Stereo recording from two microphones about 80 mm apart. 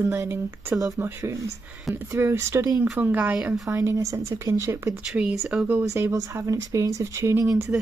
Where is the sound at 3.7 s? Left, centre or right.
Right.